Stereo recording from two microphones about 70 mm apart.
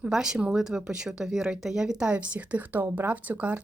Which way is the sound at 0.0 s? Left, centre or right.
Centre.